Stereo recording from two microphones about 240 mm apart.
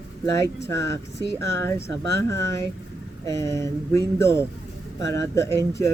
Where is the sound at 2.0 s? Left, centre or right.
Right.